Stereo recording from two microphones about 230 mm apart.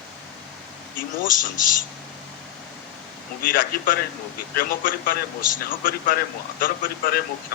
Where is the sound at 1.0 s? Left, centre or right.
Left.